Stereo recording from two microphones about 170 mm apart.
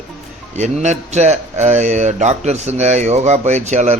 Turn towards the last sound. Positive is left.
turn(degrees=-45)  # may be behind; listen again after turning